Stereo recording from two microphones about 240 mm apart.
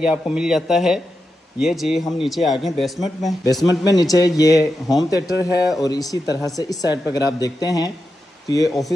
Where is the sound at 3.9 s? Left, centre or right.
Centre.